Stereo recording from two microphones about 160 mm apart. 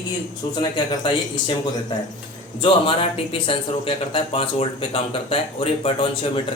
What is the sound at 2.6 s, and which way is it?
Speech, 35° left (ahead or behind).